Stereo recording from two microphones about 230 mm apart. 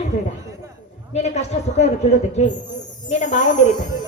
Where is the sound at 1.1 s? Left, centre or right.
Left.